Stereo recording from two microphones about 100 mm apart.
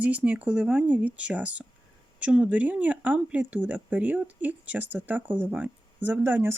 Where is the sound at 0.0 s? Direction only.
15° right (ahead or behind).